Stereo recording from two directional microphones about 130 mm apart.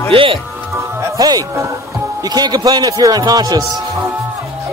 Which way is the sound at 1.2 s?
30° right (ahead or behind).